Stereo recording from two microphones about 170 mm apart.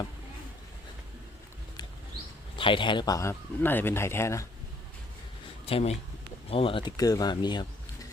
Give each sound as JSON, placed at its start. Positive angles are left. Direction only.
{"t": 2.6, "sound": "speech", "side_deg": 30}
{"t": 5.6, "sound": "speech", "side_deg": 35}